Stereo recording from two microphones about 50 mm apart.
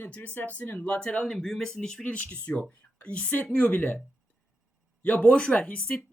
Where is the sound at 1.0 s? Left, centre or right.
Centre.